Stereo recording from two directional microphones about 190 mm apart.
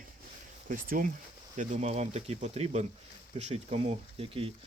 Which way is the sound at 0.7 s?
45° right (ahead or behind).